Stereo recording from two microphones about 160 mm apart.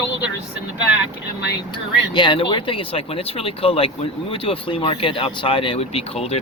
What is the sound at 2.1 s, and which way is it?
Speech, 30° left (ahead or behind).